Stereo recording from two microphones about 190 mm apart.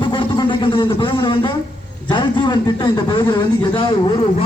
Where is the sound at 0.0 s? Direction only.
25° left (ahead or behind).